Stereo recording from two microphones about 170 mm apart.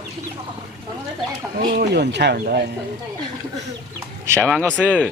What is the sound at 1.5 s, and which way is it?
Speech, 65° right (ahead or behind).